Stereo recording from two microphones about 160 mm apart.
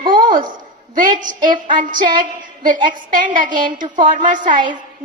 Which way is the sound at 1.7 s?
55° right (ahead or behind).